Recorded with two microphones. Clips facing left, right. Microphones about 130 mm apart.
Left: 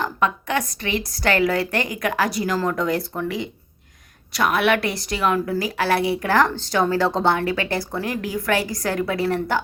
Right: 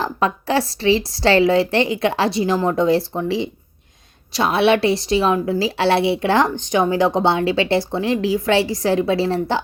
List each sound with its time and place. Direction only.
0.0 s a woman's voice: 30° right (ahead or behind)